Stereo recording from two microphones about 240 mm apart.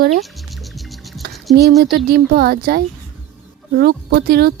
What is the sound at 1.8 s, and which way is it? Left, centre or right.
Speech, right.